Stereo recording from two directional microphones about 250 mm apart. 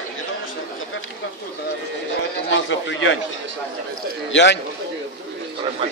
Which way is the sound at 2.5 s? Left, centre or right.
Left.